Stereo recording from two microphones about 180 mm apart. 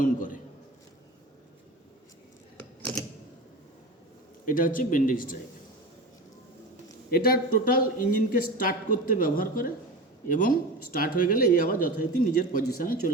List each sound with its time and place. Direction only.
0.0 s speech: 45° left (ahead or behind)
2.6 s typewriter: 5° left (ahead or behind)
4.4 s speech: 50° left (ahead or behind)
7.1 s speech: 55° left (ahead or behind)